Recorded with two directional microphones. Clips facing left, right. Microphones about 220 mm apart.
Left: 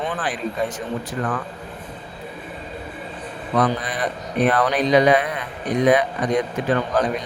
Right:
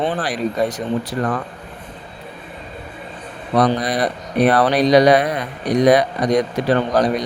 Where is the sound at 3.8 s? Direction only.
35° right (ahead or behind).